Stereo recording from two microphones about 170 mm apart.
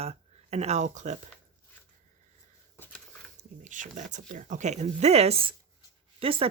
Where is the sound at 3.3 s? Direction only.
45° right (ahead or behind).